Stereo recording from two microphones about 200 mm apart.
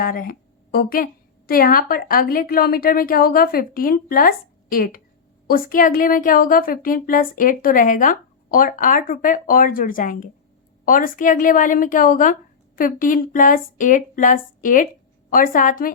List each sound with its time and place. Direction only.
0.0 s a woman's voice: 45° left (ahead or behind)